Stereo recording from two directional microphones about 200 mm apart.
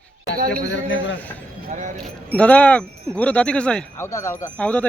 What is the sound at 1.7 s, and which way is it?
Speech, 40° right (ahead or behind).